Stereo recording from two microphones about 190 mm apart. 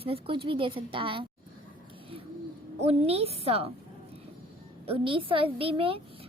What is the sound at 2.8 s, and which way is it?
Speech, 30° right (ahead or behind).